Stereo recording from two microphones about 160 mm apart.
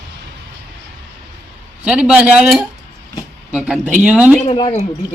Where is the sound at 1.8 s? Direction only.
5° right (ahead or behind).